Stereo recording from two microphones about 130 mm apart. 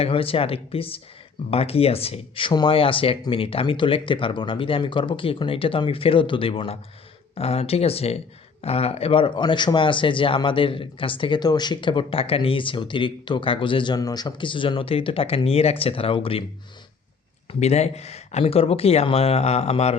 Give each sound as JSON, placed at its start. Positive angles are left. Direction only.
{"t": 0.0, "sound": "speech", "side_deg": 45}
{"t": 17.5, "sound": "speech", "side_deg": 55}